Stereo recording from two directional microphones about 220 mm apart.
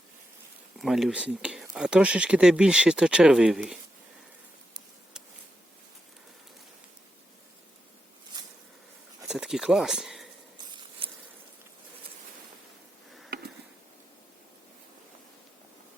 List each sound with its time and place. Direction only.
0.8 s speech: centre (ahead or behind)
9.2 s speech: 5° right (ahead or behind)
10.7 s a sound: 20° right (ahead or behind)